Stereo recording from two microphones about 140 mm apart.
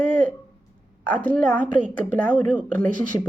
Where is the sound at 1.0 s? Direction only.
10° left (ahead or behind).